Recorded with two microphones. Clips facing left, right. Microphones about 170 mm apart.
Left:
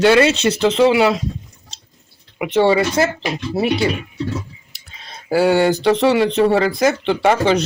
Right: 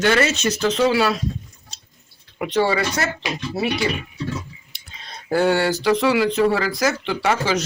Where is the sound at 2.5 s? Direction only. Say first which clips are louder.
Left 5 dB; 25° left (ahead or behind).